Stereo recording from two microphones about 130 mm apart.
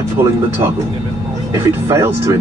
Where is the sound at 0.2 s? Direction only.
20° right (ahead or behind).